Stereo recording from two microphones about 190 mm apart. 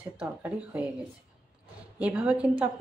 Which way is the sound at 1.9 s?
5° right (ahead or behind).